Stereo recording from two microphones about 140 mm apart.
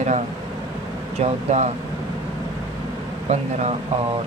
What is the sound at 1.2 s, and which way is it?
Speech, 55° right (ahead or behind).